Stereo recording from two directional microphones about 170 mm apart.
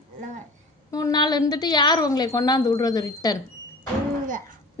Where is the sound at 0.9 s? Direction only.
20° left (ahead or behind).